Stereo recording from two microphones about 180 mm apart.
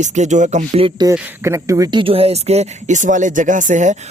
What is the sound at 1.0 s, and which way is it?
Speech, 15° right (ahead or behind).